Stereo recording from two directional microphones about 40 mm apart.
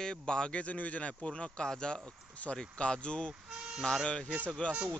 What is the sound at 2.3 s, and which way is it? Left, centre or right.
Speech, left.